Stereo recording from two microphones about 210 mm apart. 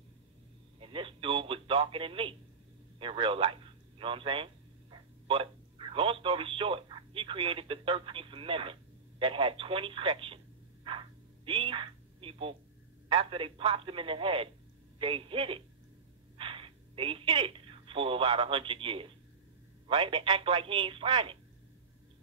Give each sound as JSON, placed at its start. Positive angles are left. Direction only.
{"t": 0.7, "sound": "speech", "side_deg": -25}
{"t": 9.2, "sound": "telephone", "side_deg": -25}
{"t": 13.1, "sound": "speech", "side_deg": -25}